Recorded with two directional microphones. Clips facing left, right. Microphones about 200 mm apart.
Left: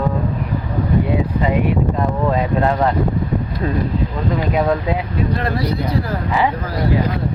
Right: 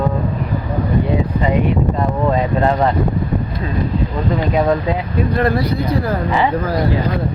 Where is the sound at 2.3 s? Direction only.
Centre (ahead or behind).